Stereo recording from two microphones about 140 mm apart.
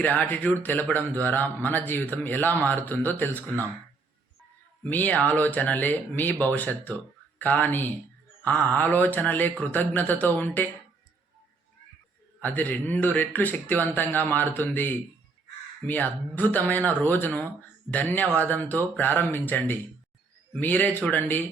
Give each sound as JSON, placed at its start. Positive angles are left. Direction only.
{"t": 0.0, "sound": "speech", "side_deg": 10}
{"t": 4.8, "sound": "speech", "side_deg": 10}
{"t": 12.4, "sound": "speech", "side_deg": 10}